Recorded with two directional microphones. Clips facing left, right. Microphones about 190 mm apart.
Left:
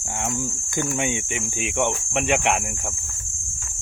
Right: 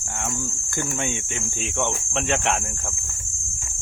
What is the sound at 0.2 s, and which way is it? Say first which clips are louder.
Speech: left 3 dB; 15° left (ahead or behind).